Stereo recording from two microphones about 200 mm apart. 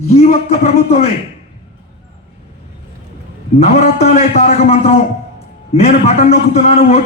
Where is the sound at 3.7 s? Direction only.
30° left (ahead or behind).